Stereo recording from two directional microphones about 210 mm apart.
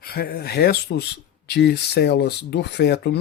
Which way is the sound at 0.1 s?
45° left (ahead or behind).